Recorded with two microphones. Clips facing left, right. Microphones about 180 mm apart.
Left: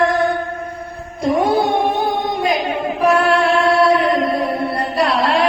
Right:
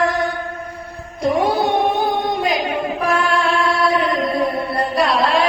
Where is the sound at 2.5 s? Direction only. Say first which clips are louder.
Left 1 dB; 60° left (ahead or behind).